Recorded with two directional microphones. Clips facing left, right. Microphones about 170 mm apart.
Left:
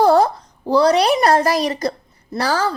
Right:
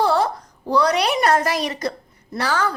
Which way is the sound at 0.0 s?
40° left (ahead or behind).